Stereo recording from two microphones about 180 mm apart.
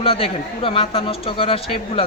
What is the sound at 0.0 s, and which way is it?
A woman's voice, 30° left (ahead or behind).